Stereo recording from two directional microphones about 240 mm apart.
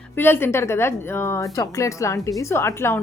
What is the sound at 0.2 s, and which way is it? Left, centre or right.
A woman's voice, centre.